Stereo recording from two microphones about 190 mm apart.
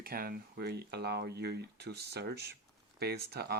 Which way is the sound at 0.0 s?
50° right (ahead or behind).